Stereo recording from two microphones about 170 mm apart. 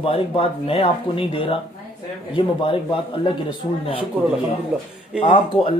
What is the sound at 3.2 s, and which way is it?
Speech, 30° left (ahead or behind).